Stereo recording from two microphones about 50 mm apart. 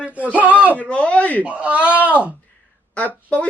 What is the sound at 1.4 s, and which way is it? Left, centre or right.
Speech, right.